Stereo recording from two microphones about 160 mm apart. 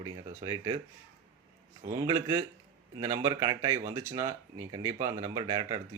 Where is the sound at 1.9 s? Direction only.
20° right (ahead or behind).